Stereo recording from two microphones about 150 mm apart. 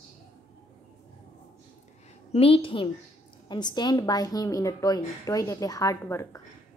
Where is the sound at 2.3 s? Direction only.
40° left (ahead or behind); by 6.4 s 20° left (ahead or behind).